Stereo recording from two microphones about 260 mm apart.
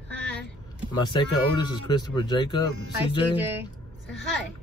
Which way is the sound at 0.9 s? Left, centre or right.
Centre.